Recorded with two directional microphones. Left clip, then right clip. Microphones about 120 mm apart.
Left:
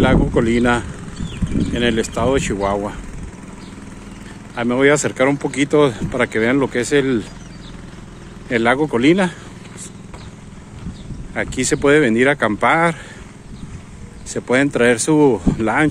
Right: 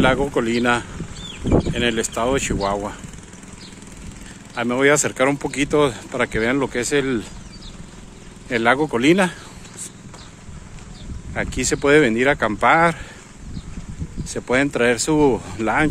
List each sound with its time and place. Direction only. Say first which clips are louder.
0.0 s speech: left 2 dB; 15° right (ahead or behind)
4.6 s speech: left 2 dB; 20° right (ahead or behind)
8.5 s speech: left 2 dB; 15° right (ahead or behind)
11.3 s speech: left 3 dB; 15° right (ahead or behind)
14.3 s speech: left 3 dB; 15° right (ahead or behind)